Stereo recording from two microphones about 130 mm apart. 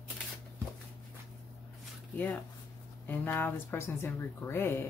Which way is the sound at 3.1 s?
15° left (ahead or behind).